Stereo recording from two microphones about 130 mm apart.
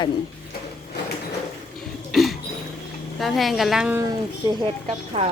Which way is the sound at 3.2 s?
Centre (ahead or behind).